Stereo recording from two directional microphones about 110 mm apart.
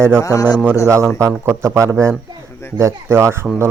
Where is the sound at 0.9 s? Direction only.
25° right (ahead or behind).